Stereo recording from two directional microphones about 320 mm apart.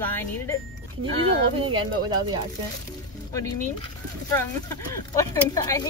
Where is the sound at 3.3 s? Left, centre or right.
Centre.